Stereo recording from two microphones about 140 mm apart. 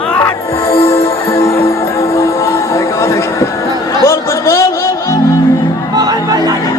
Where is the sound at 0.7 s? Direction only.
45° left (ahead or behind).